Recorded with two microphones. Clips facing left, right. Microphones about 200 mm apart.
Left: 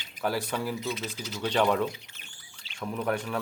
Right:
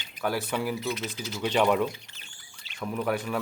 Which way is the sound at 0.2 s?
Centre (ahead or behind).